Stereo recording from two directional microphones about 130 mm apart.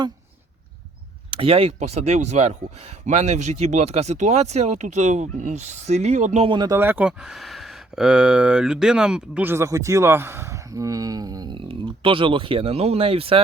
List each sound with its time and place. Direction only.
1.3 s speech: 45° right (ahead or behind)
6.5 s speech: 30° right (ahead or behind)
6.7 s speech: 15° right (ahead or behind)
7.2 s speech: centre (ahead or behind); by 13.4 s 45° right (ahead or behind)